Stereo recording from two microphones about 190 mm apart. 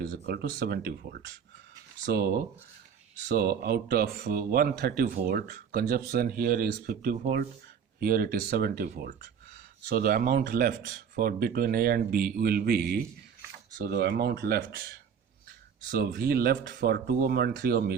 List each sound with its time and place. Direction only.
0.0 s speech: 55° right (ahead or behind)
2.0 s speech: 55° right (ahead or behind)